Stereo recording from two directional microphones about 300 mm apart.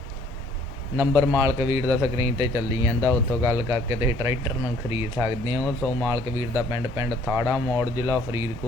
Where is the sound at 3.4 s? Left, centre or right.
Centre.